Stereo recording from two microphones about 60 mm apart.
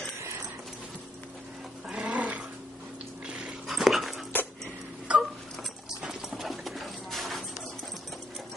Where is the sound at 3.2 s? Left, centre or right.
Centre.